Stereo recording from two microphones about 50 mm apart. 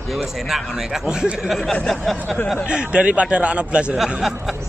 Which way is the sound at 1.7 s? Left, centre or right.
Centre.